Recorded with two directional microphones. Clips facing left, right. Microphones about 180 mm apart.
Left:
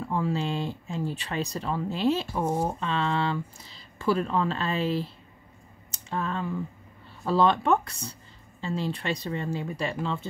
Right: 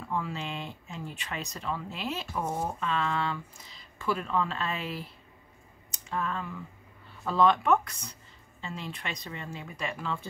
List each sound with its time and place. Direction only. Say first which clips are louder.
0.1 s speech: left 6 dB; 35° left (ahead or behind)